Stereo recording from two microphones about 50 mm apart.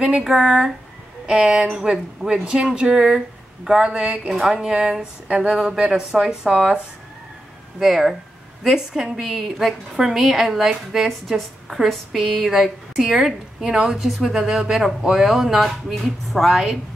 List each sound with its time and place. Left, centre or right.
1.2 s speech: centre
4.3 s speech: centre
7.8 s a woman's voice: centre